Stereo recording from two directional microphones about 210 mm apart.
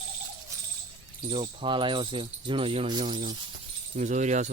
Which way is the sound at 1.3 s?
25° right (ahead or behind).